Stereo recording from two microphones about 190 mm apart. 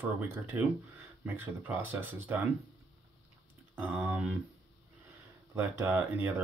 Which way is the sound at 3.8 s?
10° right (ahead or behind).